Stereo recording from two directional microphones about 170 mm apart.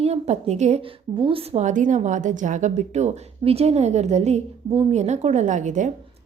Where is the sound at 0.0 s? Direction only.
40° right (ahead or behind).